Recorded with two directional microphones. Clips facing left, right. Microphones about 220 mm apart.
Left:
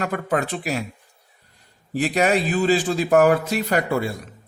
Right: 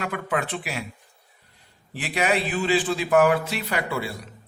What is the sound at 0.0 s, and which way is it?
Speech, 40° left (ahead or behind).